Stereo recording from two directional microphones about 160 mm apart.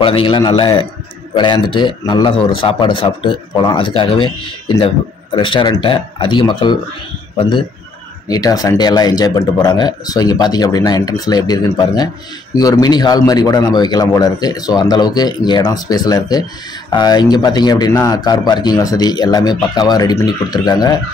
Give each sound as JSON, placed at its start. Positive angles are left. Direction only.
{"t": 0.0, "sound": "a man's voice", "side_deg": 35}